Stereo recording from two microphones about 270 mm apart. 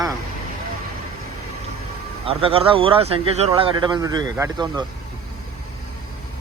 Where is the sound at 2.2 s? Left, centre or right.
Centre.